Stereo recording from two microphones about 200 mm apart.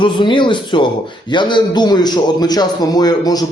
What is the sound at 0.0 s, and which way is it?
A man's voice, 25° left (ahead or behind).